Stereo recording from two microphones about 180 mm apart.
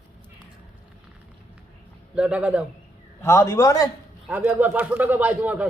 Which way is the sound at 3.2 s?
15° left (ahead or behind).